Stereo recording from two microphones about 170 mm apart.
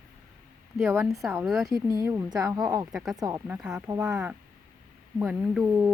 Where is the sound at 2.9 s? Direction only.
Centre (ahead or behind).